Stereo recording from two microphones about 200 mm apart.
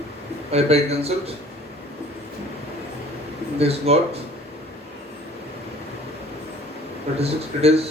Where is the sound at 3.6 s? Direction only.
30° right (ahead or behind).